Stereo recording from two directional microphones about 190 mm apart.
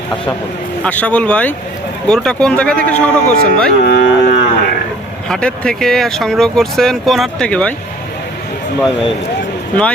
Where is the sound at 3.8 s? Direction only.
60° left (ahead or behind).